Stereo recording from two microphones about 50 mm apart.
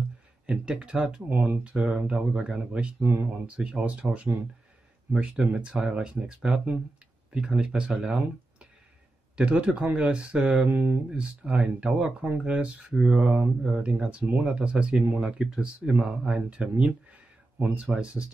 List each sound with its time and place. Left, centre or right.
0.5 s speech: right
3.0 s speech: right
3.4 s speech: right
9.4 s speech: right
10.7 s speech: right
11.1 s speech: right